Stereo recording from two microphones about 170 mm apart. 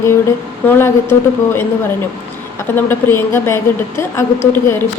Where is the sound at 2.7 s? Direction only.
10° left (ahead or behind).